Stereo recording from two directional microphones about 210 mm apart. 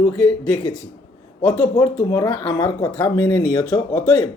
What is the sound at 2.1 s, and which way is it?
Speech, 15° left (ahead or behind).